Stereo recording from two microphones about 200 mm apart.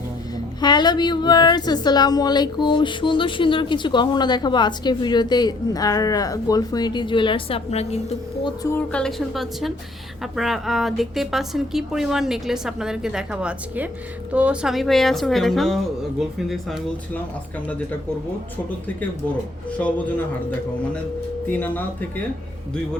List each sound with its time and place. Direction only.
0.3 s a woman's voice: 20° left (ahead or behind)
8.4 s speech: 15° left (ahead or behind)
8.9 s a woman's voice: 5° left (ahead or behind)
19.8 s speech: 5° left (ahead or behind)
21.4 s speech: 10° left (ahead or behind)